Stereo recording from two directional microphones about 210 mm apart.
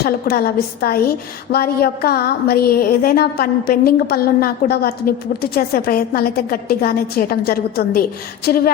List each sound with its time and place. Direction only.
0.0 s a woman's voice: 45° left (ahead or behind)